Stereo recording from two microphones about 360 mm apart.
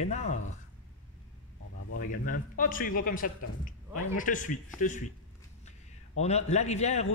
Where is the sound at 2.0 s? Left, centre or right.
Left.